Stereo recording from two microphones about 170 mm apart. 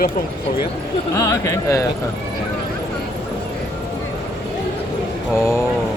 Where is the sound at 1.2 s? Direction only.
15° left (ahead or behind).